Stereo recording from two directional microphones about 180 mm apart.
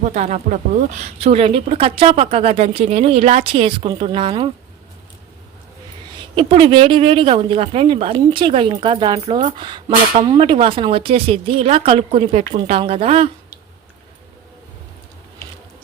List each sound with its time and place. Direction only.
0.0 s speech: 40° right (ahead or behind)
6.3 s speech: 30° right (ahead or behind)